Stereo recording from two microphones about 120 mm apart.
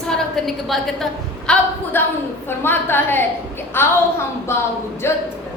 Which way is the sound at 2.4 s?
20° left (ahead or behind).